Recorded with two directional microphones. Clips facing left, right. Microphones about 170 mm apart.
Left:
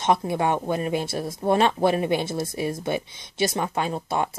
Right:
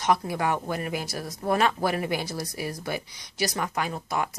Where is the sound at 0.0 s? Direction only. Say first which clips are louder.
Left 3 dB; 25° left (ahead or behind).